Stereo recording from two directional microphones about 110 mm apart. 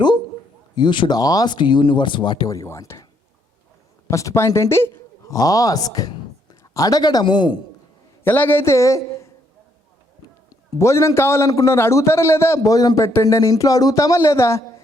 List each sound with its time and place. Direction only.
0.8 s speech: 45° left (ahead or behind); by 3.1 s 25° left (ahead or behind)
4.1 s a man's voice: 30° left (ahead or behind)
8.2 s a man's voice: 20° left (ahead or behind)
10.8 s a man's voice: 25° left (ahead or behind)